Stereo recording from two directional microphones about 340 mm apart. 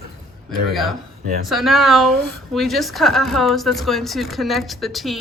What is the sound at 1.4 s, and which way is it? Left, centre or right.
A woman's voice, centre.